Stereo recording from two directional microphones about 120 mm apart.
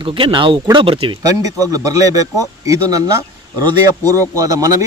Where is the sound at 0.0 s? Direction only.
45° right (ahead or behind).